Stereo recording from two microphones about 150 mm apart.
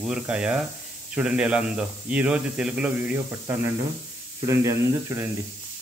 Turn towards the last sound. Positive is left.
turn(degrees=-20)  # may be behind; listen again after turning